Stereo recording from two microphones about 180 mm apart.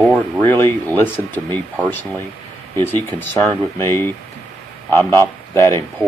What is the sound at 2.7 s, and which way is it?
Speech, 10° left (ahead or behind).